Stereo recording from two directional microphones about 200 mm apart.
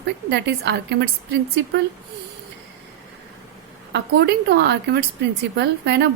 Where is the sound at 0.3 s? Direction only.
55° right (ahead or behind).